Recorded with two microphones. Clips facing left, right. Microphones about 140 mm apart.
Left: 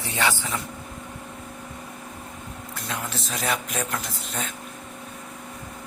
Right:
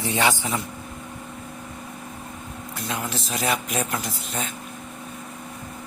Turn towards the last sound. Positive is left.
turn(degrees=-5)  # may be behind; listen again after turning